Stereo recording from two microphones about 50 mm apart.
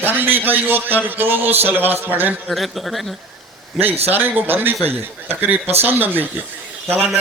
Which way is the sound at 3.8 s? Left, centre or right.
Right.